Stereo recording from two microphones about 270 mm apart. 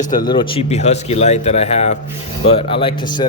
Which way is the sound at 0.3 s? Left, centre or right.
Centre.